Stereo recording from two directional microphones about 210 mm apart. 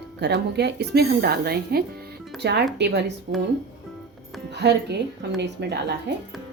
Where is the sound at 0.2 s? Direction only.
50° right (ahead or behind).